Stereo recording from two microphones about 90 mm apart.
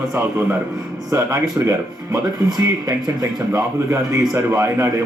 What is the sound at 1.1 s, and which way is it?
A man's voice, 35° right (ahead or behind).